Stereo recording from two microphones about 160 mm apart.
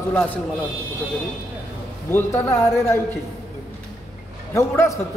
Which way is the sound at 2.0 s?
15° left (ahead or behind).